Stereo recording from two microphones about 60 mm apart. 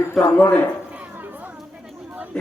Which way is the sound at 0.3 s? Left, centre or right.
Left.